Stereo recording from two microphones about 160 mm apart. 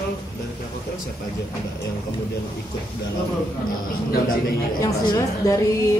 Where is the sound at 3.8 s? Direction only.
65° left (ahead or behind).